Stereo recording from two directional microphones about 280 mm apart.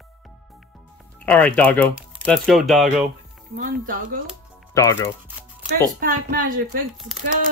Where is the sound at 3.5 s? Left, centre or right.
Right.